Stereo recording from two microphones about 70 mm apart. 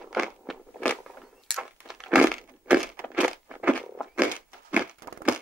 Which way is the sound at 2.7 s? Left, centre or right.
Centre.